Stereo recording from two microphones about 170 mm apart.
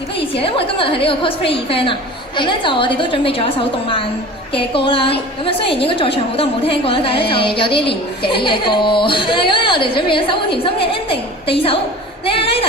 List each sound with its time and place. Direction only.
0.4 s a woman's voice: 30° left (ahead or behind)